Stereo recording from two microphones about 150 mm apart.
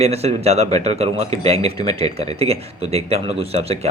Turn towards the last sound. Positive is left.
turn(degrees=-40)  # may be behind; listen again after turning